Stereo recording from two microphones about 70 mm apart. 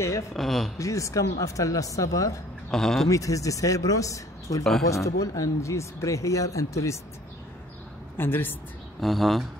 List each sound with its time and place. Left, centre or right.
0.3 s speech: centre
0.7 s speech: left
2.7 s speech: centre
3.1 s speech: left
8.2 s speech: left
9.0 s speech: centre